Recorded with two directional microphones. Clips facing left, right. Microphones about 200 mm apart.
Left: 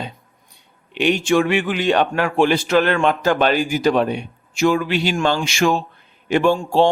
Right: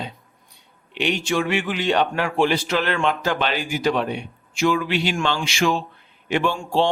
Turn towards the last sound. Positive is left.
turn(degrees=45)  # may be behind; listen again after turning